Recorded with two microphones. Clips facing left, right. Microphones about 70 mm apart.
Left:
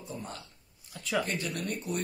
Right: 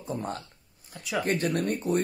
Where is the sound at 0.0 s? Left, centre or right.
Right.